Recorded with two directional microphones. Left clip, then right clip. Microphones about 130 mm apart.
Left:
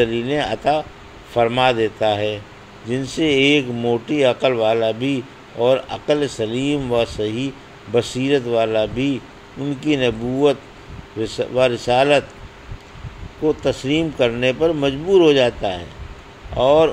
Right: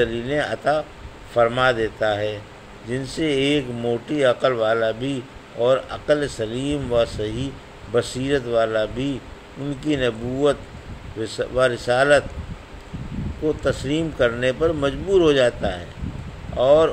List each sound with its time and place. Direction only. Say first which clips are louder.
0.0 s speech: left 3 dB; 15° left (ahead or behind)
11.1 s speech: left 3 dB; 15° left (ahead or behind)
13.5 s speech: left 3 dB; 15° left (ahead or behind)